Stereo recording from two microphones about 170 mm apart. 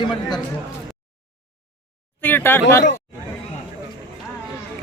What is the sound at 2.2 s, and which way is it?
Speech, 10° left (ahead or behind).